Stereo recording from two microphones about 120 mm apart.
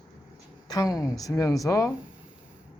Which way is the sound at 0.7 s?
30° left (ahead or behind).